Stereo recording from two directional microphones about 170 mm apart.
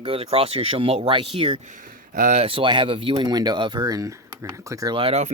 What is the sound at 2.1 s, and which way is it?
Speech, 45° right (ahead or behind).